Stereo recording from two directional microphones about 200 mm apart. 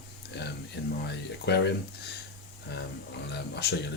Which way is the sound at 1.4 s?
55° left (ahead or behind).